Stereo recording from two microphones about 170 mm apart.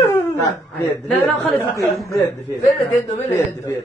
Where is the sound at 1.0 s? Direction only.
Centre (ahead or behind).